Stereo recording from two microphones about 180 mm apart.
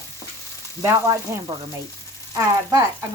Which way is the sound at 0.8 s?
15° right (ahead or behind).